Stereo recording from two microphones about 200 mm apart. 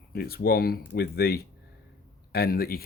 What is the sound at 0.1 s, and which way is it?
Speech, 50° left (ahead or behind).